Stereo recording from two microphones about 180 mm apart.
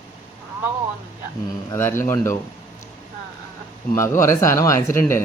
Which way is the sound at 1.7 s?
15° left (ahead or behind).